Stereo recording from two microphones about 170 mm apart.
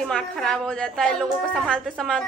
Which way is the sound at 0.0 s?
5° left (ahead or behind).